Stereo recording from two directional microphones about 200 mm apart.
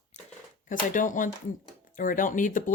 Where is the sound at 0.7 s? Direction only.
40° left (ahead or behind).